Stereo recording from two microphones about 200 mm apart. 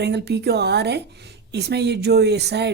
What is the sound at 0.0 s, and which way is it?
Speech, 55° right (ahead or behind).